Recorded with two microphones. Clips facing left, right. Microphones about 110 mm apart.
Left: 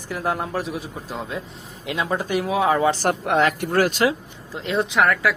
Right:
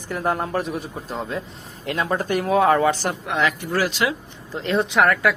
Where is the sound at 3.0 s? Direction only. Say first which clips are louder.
Left 3 dB; 55° left (ahead or behind).